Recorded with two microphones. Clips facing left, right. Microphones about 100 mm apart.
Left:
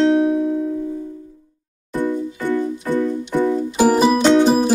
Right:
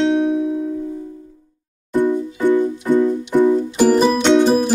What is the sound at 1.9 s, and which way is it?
Music, 15° right (ahead or behind).